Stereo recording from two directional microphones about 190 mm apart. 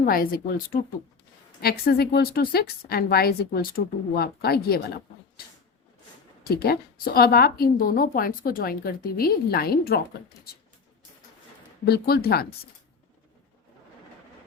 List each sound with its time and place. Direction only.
0.0 s a woman's voice: 50° left (ahead or behind)
6.5 s a woman's voice: 55° left (ahead or behind)
11.9 s a woman's voice: 55° left (ahead or behind)